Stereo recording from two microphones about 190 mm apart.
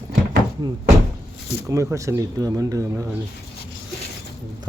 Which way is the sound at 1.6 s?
15° right (ahead or behind).